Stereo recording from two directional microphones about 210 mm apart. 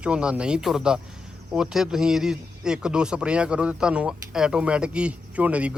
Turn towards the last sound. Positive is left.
turn(degrees=-5)  # may be behind; listen again after turning